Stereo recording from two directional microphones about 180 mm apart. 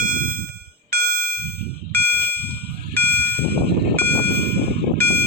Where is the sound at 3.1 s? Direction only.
60° right (ahead or behind).